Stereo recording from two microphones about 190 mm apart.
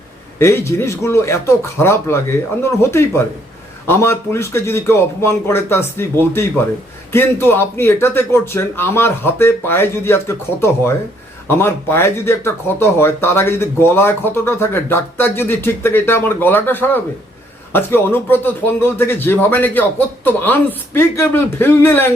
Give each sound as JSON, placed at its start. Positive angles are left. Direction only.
{"t": 0.3, "sound": "speech", "side_deg": 15}